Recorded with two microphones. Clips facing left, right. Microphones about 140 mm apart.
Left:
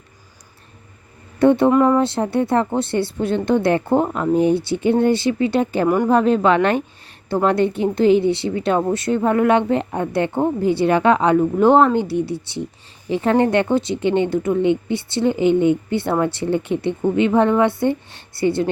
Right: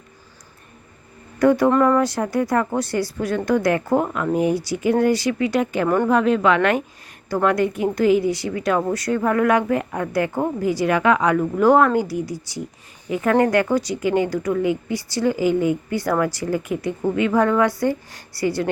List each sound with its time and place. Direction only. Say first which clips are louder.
1.4 s a woman's voice: left 2 dB; 25° left (ahead or behind)